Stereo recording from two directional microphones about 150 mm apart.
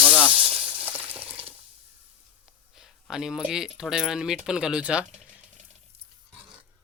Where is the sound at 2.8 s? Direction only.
5° right (ahead or behind).